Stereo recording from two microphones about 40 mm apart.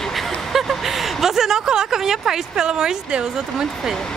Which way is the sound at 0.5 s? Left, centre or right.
Centre.